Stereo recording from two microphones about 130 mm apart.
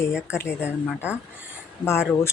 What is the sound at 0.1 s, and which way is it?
Speech, 10° right (ahead or behind).